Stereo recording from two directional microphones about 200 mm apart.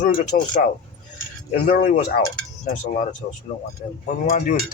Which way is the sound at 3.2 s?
45° left (ahead or behind).